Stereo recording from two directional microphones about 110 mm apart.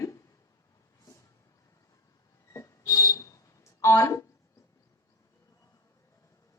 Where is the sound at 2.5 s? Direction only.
30° left (ahead or behind).